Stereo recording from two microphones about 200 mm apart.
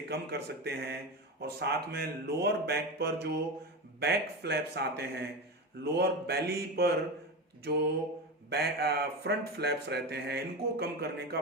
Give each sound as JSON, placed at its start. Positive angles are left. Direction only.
{"t": 0.1, "sound": "speech", "side_deg": -55}
{"t": 7.7, "sound": "mantra", "side_deg": -55}
{"t": 8.4, "sound": "speech", "side_deg": -50}